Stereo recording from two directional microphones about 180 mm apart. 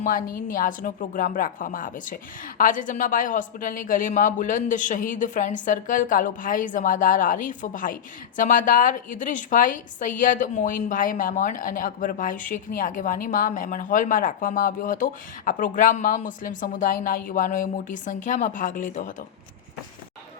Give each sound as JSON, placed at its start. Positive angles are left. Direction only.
{"t": 0.0, "sound": "a woman's voice", "side_deg": 50}